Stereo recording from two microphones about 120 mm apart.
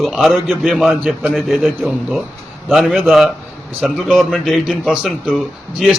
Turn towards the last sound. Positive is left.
turn(degrees=0)  # may be behind; listen again after turning